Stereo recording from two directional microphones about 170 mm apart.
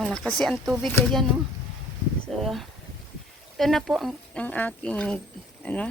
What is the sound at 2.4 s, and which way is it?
Speech, centre (ahead or behind).